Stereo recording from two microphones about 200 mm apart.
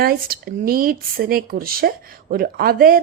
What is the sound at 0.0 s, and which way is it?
A woman's voice, 50° right (ahead or behind).